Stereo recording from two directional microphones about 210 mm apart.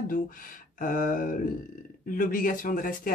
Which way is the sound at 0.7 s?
40° left (ahead or behind).